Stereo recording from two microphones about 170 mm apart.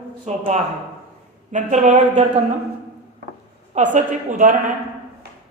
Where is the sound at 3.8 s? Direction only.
45° right (ahead or behind).